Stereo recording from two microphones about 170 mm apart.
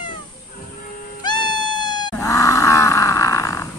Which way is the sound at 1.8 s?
25° left (ahead or behind).